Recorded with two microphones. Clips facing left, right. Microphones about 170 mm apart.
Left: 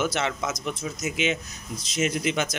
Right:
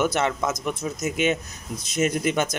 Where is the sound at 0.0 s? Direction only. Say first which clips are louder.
Right 4 dB; 55° right (ahead or behind).